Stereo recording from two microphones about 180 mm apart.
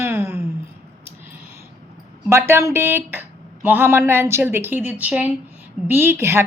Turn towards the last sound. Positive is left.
turn(degrees=-15)  # may be behind; listen again after turning